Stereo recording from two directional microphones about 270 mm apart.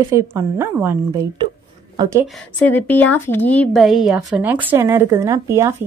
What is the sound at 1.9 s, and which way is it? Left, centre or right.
Speech, centre.